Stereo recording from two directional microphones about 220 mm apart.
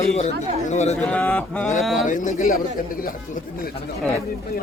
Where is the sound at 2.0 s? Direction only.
35° left (ahead or behind).